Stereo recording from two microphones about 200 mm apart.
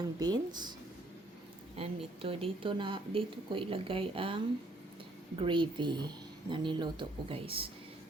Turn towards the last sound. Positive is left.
turn(degrees=-25)  # may be behind; listen again after turning